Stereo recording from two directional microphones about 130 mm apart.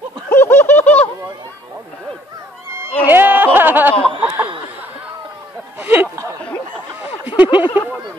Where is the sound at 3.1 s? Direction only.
15° right (ahead or behind).